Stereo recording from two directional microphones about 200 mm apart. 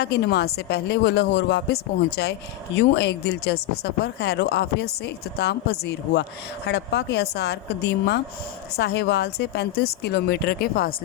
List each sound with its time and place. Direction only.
0.0 s a woman's voice: 55° left (ahead or behind)